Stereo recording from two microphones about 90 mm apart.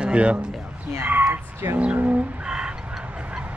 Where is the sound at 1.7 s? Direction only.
15° right (ahead or behind).